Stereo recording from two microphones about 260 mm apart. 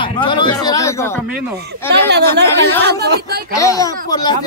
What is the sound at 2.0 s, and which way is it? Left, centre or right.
Speech, right.